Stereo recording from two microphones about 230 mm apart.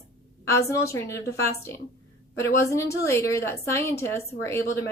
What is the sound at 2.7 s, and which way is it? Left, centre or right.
A woman's voice, centre.